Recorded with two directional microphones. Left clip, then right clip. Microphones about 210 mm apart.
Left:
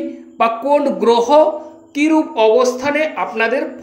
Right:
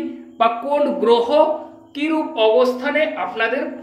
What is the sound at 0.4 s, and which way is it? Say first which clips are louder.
Speech: left 3 dB; 35° left (ahead or behind).